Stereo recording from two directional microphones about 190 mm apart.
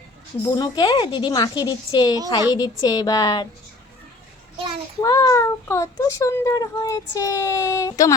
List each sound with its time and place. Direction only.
0.5 s a woman's voice: 20° left (ahead or behind)
4.5 s child singing: 25° right (ahead or behind)
4.9 s speech: 15° left (ahead or behind)